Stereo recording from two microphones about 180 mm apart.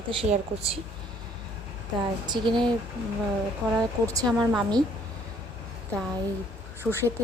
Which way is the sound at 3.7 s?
15° right (ahead or behind).